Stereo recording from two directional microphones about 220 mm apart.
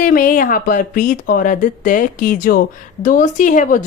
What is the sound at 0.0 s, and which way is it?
Speech, 40° left (ahead or behind).